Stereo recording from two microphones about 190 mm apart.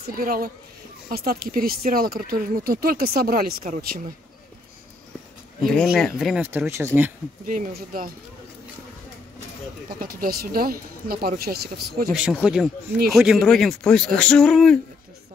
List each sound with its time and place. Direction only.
0.0 s speech: 50° right (ahead or behind)
5.6 s speech: 5° left (ahead or behind)
7.4 s speech: 45° right (ahead or behind)
9.9 s speech: 50° right (ahead or behind)
12.1 s speech: 5° right (ahead or behind)